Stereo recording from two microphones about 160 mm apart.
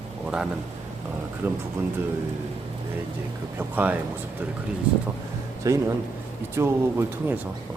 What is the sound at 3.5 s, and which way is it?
Speech, 10° right (ahead or behind).